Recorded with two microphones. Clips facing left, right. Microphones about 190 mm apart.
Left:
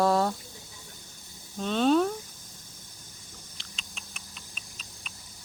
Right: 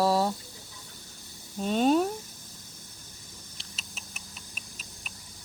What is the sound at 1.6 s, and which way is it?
Speech, 10° right (ahead or behind).